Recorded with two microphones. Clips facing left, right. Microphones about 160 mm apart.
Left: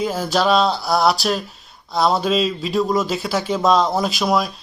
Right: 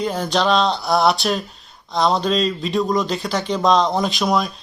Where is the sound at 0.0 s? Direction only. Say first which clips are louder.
Left 1 dB; 5° left (ahead or behind).